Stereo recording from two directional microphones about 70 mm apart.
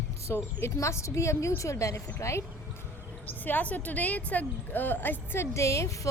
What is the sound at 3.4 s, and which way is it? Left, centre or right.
A woman's voice, left.